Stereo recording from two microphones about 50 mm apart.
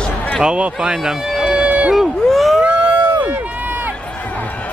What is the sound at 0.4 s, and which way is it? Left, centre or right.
Run, centre.